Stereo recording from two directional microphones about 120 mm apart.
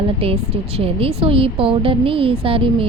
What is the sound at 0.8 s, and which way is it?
A woman's voice, 50° right (ahead or behind).